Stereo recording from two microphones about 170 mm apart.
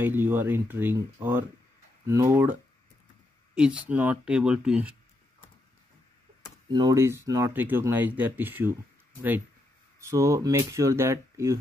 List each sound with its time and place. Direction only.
0.0 s speech: 10° right (ahead or behind)
6.7 s speech: 20° right (ahead or behind)
9.9 s speech: 15° right (ahead or behind)